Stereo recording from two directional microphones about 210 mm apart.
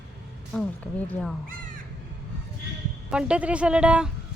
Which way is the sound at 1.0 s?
5° left (ahead or behind).